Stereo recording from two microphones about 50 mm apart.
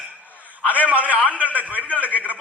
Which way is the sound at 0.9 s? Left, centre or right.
Right.